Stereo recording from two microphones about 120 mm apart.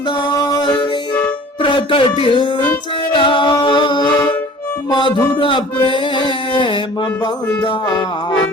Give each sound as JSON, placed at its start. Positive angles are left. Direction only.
{"t": 0.2, "sound": "music", "side_deg": 35}
{"t": 1.6, "sound": "speech", "side_deg": 45}
{"t": 3.1, "sound": "music", "side_deg": 45}